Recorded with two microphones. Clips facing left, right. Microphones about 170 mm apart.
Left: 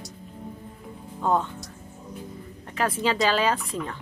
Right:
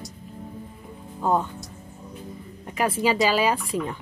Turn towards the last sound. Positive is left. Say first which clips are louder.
# right 2 dB
turn(degrees=-10)  # may be behind; listen again after turning